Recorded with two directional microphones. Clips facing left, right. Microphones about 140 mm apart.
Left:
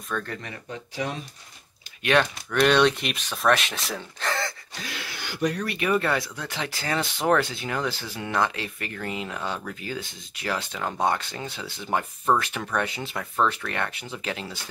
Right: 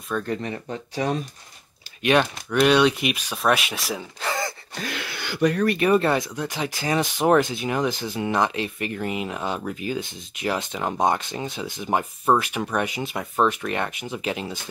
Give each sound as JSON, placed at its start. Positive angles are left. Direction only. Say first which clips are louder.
{"t": 0.1, "sound": "speech", "louder": "right 3 dB", "side_deg": -10}
{"t": 0.7, "sound": "speech", "louder": "right 4 dB", "side_deg": -40}
{"t": 2.5, "sound": "speech", "louder": "right 2 dB", "side_deg": -5}
{"t": 4.7, "sound": "a sound", "louder": "right 5 dB", "side_deg": -55}
{"t": 5.8, "sound": "speech", "louder": "right 2 dB", "side_deg": -30}